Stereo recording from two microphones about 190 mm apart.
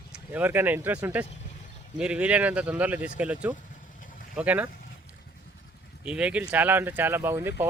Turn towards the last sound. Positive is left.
turn(degrees=-15)  # may be behind; listen again after turning